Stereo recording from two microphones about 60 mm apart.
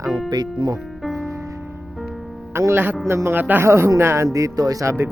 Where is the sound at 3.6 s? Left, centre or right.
Right.